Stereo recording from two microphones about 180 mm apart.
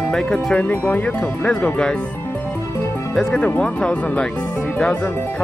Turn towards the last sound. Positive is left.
turn(degrees=10)  # may be behind; listen again after turning